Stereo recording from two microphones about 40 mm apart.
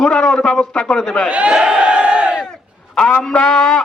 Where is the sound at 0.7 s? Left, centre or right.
Left.